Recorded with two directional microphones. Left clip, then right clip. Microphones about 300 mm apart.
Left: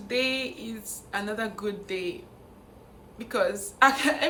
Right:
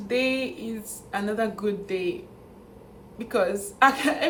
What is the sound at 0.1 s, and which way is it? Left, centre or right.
A woman's voice, centre.